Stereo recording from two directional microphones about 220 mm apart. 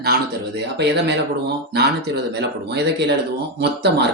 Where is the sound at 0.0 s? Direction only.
45° right (ahead or behind).